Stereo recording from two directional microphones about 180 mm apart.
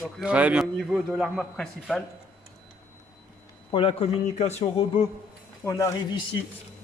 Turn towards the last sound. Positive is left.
turn(degrees=20)  # may be behind; listen again after turning